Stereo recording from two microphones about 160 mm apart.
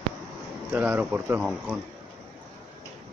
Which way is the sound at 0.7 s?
10° right (ahead or behind).